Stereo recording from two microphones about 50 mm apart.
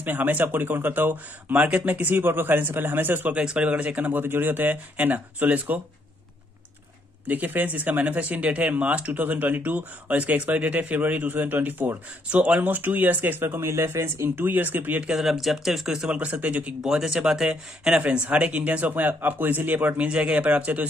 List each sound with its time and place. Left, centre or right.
0.0 s speech: right
3.4 s speech: right
7.2 s speech: right
12.3 s a man's voice: right
12.6 s speech: right
13.6 s speech: right
14.4 s speech: right
15.0 s speech: centre
16.1 s a man's voice: right
16.8 s speech: centre
17.9 s speech: right
20.1 s a man's voice: right